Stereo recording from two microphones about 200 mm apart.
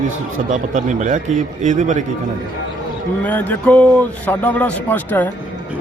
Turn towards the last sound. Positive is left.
turn(degrees=10)  # may be behind; listen again after turning